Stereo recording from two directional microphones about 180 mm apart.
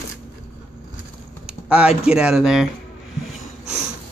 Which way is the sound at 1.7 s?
5° right (ahead or behind).